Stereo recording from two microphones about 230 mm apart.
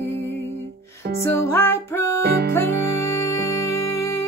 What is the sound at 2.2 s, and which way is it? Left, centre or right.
Music, right.